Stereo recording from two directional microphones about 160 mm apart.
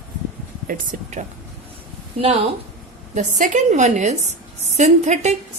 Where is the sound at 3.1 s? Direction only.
50° right (ahead or behind).